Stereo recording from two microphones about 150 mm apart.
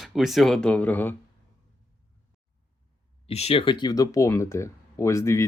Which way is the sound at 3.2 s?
40° left (ahead or behind).